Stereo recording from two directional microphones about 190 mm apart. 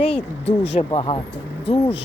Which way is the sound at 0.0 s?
30° left (ahead or behind).